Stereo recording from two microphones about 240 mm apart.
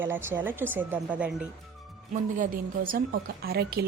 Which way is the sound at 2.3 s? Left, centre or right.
Right.